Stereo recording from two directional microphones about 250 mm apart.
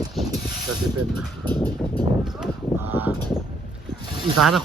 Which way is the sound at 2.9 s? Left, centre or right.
Centre.